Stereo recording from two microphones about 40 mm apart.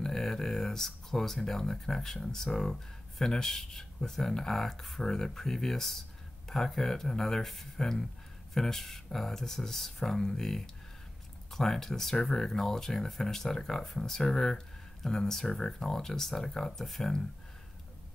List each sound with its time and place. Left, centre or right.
0.0 s speech: centre